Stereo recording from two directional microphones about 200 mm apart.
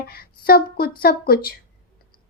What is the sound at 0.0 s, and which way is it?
A woman's voice, 50° left (ahead or behind).